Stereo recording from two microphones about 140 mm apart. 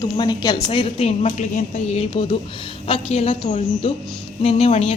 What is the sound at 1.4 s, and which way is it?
A woman's voice, 55° left (ahead or behind).